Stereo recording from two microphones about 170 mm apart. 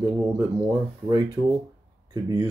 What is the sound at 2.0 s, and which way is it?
Speech, 20° right (ahead or behind).